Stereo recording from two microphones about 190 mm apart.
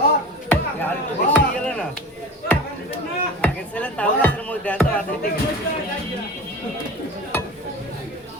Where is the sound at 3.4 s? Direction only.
5° left (ahead or behind).